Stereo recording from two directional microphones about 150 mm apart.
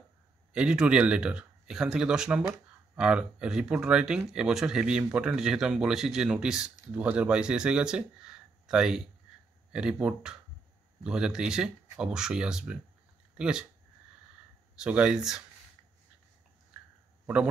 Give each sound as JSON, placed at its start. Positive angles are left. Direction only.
{"t": 0.5, "sound": "speech", "side_deg": -5}
{"t": 14.8, "sound": "speech", "side_deg": -5}